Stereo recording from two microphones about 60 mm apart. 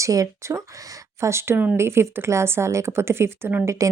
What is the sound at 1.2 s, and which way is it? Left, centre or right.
A woman's voice, right.